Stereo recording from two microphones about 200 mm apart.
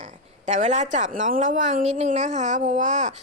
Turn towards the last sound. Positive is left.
turn(degrees=-35)  # may be behind; listen again after turning